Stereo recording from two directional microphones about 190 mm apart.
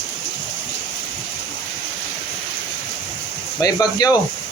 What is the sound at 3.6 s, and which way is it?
Speech, 20° left (ahead or behind).